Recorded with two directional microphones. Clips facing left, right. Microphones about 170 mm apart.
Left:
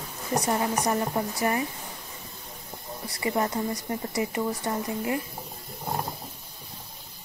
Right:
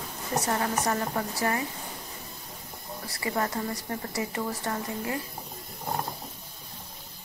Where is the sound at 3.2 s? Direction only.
20° left (ahead or behind).